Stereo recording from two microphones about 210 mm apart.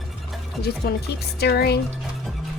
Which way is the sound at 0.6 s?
50° left (ahead or behind).